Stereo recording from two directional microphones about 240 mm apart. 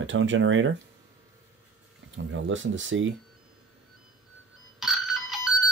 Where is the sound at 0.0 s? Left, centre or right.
Right.